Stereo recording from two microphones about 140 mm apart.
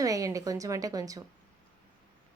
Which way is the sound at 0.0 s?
25° right (ahead or behind).